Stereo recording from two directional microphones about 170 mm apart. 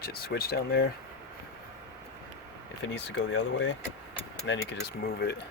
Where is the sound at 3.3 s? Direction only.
90° left.